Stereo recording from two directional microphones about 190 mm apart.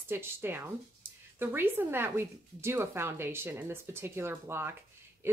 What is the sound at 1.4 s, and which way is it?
A woman's voice, 10° right (ahead or behind).